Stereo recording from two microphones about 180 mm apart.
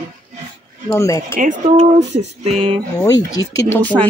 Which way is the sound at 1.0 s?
15° left (ahead or behind).